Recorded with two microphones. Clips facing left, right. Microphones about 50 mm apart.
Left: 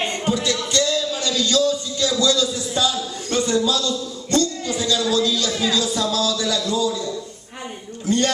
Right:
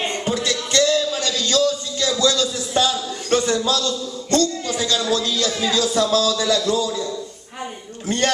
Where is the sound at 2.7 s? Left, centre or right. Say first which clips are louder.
Right 2 dB; right.